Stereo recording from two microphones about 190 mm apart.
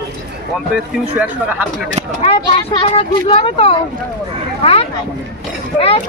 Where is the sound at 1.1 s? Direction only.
10° right (ahead or behind).